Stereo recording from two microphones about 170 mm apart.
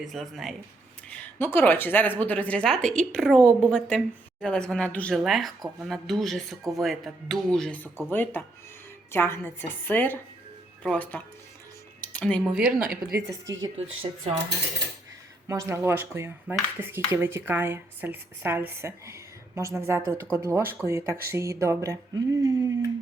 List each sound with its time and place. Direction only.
0.0 s speech: centre (ahead or behind)
1.1 s a woman's voice: 10° left (ahead or behind)
11.9 s music: 10° left (ahead or behind)
12.4 s speech: 5° right (ahead or behind)
13.7 s speech: 35° right (ahead or behind)
15.4 s speech: 20° right (ahead or behind)